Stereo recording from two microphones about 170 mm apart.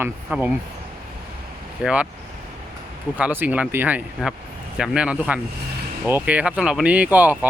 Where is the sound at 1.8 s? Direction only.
5° right (ahead or behind).